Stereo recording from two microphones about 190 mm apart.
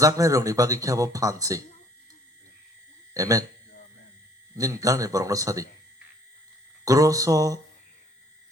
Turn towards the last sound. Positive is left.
turn(degrees=-15)  # may be behind; listen again after turning